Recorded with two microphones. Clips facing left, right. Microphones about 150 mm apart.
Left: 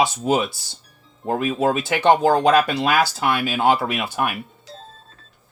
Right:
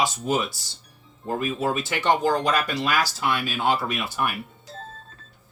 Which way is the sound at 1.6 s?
65° left (ahead or behind).